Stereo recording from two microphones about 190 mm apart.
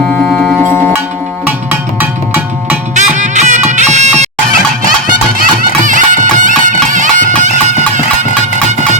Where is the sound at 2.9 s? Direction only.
40° right (ahead or behind).